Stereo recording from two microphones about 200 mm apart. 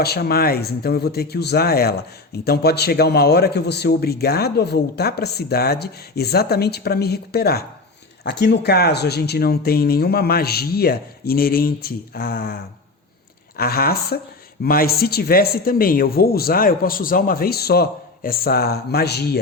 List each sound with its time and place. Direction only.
0.0 s speech: 50° left (ahead or behind)
13.6 s speech: 50° left (ahead or behind)